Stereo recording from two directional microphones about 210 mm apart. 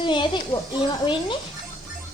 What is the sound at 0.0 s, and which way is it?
Speech, 20° left (ahead or behind).